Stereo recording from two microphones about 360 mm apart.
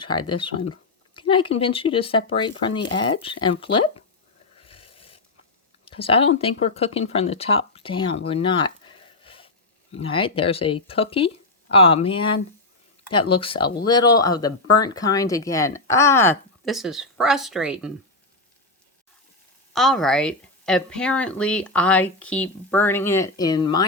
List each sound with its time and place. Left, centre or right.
0.0 s speech: centre
4.5 s a sound: centre
5.8 s speech: centre
9.2 s a sound: centre
9.9 s a woman's voice: centre
19.7 s a woman's voice: centre